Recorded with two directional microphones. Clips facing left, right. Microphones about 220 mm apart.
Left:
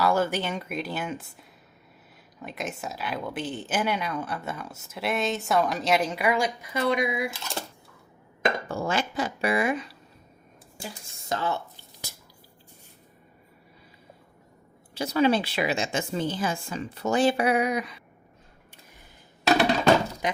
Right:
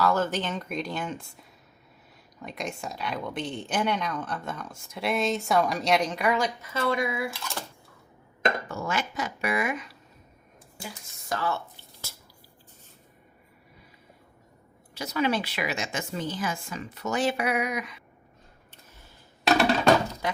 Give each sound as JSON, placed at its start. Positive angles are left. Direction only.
{"t": 0.0, "sound": "speech", "side_deg": 10}
{"t": 8.6, "sound": "speech", "side_deg": 30}
{"t": 11.3, "sound": "a woman's voice", "side_deg": 20}
{"t": 14.9, "sound": "a woman's voice", "side_deg": 30}
{"t": 20.2, "sound": "speech", "side_deg": 20}